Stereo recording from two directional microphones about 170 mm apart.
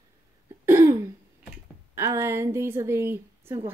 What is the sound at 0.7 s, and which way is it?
Throat clearing, 15° right (ahead or behind).